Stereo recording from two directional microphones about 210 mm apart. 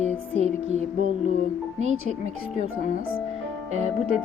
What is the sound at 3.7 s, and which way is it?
Music, 30° right (ahead or behind).